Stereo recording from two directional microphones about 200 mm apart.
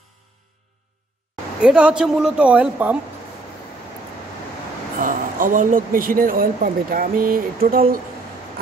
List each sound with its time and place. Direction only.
1.6 s speech: 5° right (ahead or behind)
5.0 s speech: 40° right (ahead or behind)